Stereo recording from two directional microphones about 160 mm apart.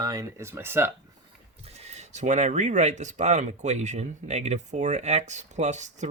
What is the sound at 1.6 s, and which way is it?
Speech, 40° right (ahead or behind).